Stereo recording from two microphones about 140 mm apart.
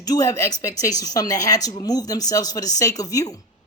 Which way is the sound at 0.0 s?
25° left (ahead or behind).